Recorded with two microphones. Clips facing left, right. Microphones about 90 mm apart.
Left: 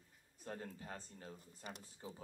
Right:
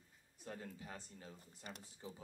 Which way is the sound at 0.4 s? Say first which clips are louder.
Left 2 dB; 40° left (ahead or behind).